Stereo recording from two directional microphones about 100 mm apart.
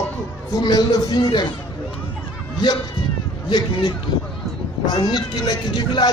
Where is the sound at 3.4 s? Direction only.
45° left (ahead or behind).